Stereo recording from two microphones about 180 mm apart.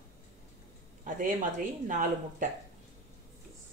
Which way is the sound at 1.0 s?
50° right (ahead or behind).